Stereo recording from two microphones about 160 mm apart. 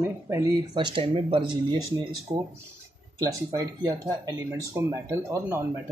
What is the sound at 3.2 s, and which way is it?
Speech, 25° right (ahead or behind).